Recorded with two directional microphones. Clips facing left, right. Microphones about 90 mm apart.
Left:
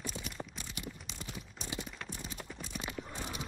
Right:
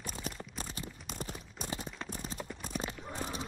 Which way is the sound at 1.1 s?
45° right (ahead or behind).